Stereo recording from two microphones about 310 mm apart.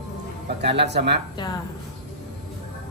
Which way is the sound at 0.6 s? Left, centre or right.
Right.